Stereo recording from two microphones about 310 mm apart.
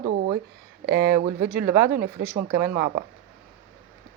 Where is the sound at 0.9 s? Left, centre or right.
Right.